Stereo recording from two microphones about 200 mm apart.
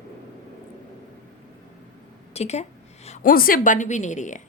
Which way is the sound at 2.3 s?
35° left (ahead or behind).